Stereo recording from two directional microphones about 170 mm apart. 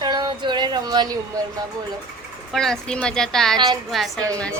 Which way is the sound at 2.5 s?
Centre (ahead or behind).